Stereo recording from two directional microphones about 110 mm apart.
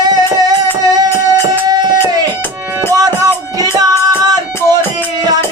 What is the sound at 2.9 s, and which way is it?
Music, 35° right (ahead or behind).